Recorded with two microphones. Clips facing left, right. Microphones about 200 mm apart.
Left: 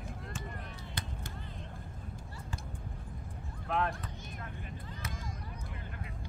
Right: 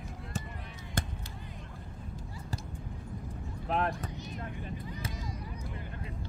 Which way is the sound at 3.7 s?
30° right (ahead or behind).